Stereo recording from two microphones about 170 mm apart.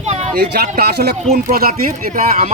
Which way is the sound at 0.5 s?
70° right (ahead or behind).